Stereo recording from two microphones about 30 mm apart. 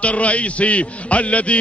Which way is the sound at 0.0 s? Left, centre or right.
Left.